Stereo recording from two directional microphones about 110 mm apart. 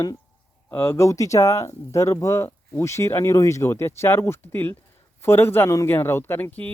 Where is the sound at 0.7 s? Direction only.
25° left (ahead or behind).